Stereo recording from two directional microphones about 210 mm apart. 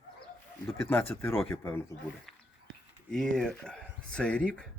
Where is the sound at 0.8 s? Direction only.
10° left (ahead or behind).